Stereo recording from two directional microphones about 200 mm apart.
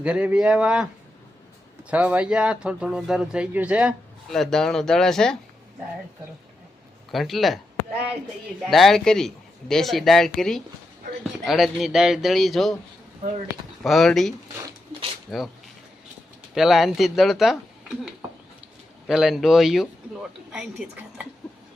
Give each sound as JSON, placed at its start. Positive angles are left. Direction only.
{"t": 0.0, "sound": "speech", "side_deg": -5}
{"t": 1.9, "sound": "speech", "side_deg": -5}
{"t": 7.1, "sound": "speech", "side_deg": 0}
{"t": 8.6, "sound": "speech", "side_deg": 0}
{"t": 13.8, "sound": "speech", "side_deg": 0}
{"t": 16.6, "sound": "speech", "side_deg": 0}